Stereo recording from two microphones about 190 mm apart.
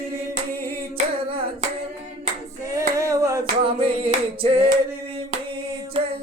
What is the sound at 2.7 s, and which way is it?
Female singing, 15° right (ahead or behind).